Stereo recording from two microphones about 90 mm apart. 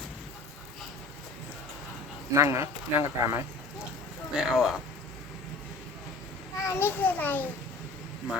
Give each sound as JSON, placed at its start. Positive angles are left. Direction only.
{"t": 2.3, "sound": "speech", "side_deg": -30}
{"t": 4.4, "sound": "speech", "side_deg": -5}
{"t": 6.7, "sound": "a child's voice", "side_deg": 25}